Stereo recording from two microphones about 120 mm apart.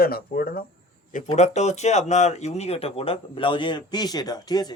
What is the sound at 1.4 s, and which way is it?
Speech, 70° left (ahead or behind).